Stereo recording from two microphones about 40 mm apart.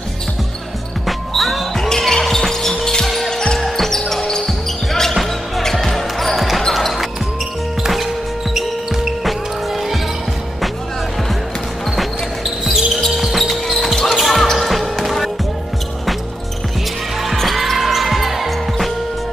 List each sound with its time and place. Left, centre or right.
1.0 s basketball bounce: centre
1.8 s basketball bounce: centre
3.3 s music: centre
4.2 s basketball bounce: centre
4.5 s basketball bounce: centre
7.8 s music: centre
8.5 s basketball bounce: centre
12.0 s basketball bounce: centre
14.1 s music: centre
17.4 s basketball bounce: centre